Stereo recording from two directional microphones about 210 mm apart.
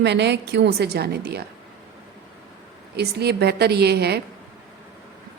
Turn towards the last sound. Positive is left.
turn(degrees=-50)  # may be behind; listen again after turning